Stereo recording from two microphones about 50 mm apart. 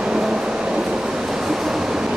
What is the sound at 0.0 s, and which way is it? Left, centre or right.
Train, centre.